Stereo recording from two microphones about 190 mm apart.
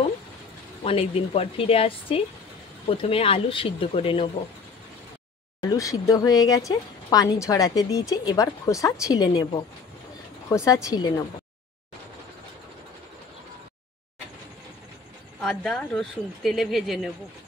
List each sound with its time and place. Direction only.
0.8 s a woman's voice: 30° left (ahead or behind)
5.7 s a woman's voice: 15° left (ahead or behind)
15.4 s speech: 5° left (ahead or behind)